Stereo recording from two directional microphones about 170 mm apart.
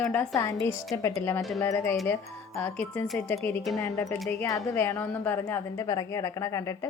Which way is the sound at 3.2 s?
10° left (ahead or behind).